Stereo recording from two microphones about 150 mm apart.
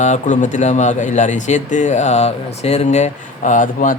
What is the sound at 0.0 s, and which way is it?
Speech, 55° left (ahead or behind).